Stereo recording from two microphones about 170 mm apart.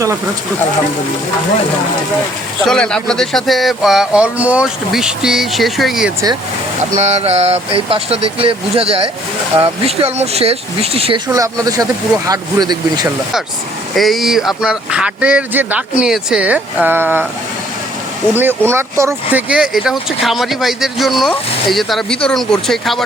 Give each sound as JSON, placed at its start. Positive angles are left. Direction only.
{"t": 2.6, "sound": "speech", "side_deg": 5}
{"t": 6.9, "sound": "speech", "side_deg": -40}
{"t": 11.3, "sound": "speech", "side_deg": -20}
{"t": 13.9, "sound": "speech", "side_deg": 0}
{"t": 18.3, "sound": "speech", "side_deg": -15}